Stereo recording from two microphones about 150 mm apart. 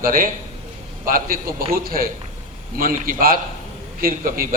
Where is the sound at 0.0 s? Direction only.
70° right (ahead or behind).